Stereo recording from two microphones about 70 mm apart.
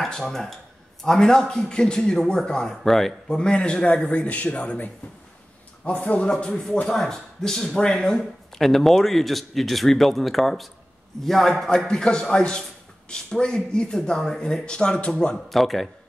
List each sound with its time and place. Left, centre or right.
0.0 s speech: centre
3.3 s a man's voice: centre